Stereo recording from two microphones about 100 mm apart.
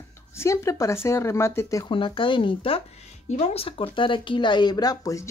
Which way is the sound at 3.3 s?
85° left.